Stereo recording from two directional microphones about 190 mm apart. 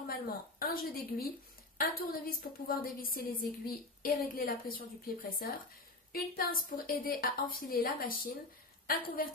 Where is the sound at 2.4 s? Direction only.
50° left (ahead or behind).